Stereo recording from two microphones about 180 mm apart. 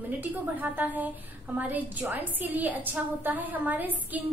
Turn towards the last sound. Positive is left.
turn(degrees=-10)  # may be behind; listen again after turning